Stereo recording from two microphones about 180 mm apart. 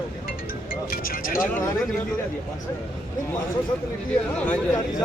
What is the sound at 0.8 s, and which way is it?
Speech, 55° left (ahead or behind).